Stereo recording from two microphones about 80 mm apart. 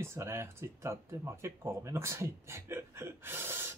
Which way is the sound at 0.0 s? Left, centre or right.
Right.